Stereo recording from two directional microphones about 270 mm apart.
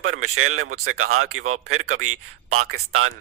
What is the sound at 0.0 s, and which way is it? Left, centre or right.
Speech, right.